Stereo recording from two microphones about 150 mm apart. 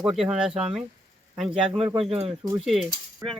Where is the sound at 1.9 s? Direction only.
40° right (ahead or behind).